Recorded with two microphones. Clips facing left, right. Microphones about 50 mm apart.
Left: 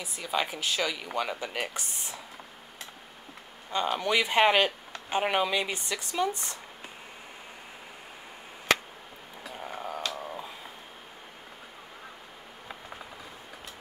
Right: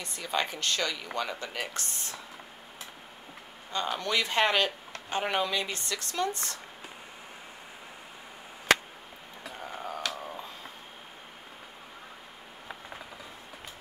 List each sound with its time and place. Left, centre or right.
0.0 s speech: centre
3.7 s speech: centre
9.6 s a sound: centre